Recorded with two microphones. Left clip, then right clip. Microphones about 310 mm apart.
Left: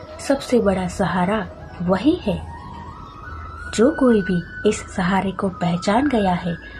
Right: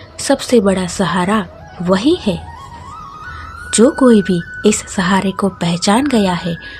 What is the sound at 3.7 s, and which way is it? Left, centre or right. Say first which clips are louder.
A woman's voice: right 6 dB; right.